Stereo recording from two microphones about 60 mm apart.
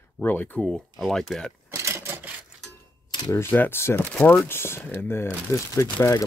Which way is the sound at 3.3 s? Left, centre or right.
Left.